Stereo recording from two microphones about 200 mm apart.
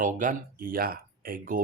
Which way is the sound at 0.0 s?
40° right (ahead or behind).